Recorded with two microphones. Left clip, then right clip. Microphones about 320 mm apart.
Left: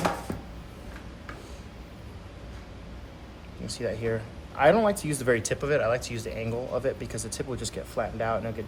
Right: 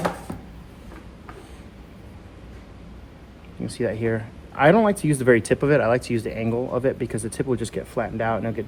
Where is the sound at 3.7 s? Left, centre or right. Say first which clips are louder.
Right 5 dB; right.